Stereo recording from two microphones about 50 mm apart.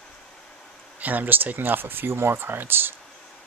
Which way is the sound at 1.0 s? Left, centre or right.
Right.